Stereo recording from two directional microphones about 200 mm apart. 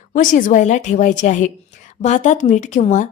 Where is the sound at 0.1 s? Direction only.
40° left (ahead or behind).